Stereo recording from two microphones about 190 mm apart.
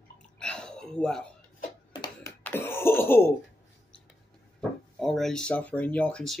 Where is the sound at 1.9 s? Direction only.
20° left (ahead or behind).